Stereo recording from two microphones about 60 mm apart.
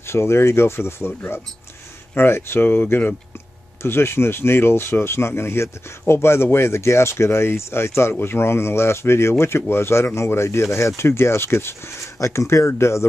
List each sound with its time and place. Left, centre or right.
0.0 s speech: left
2.1 s speech: left
3.8 s speech: left